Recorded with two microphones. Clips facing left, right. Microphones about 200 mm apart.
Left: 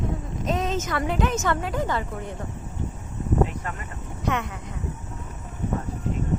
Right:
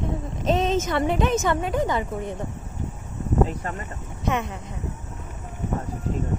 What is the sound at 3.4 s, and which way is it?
Speech, 35° right (ahead or behind).